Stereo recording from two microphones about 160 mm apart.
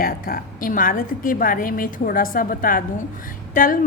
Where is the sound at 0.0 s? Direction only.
65° left (ahead or behind).